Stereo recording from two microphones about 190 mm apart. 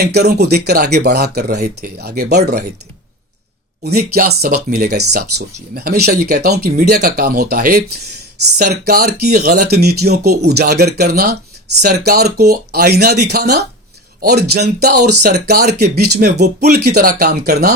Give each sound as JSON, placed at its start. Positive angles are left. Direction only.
{"t": 0.0, "sound": "speech", "side_deg": -60}
{"t": 3.8, "sound": "speech", "side_deg": -55}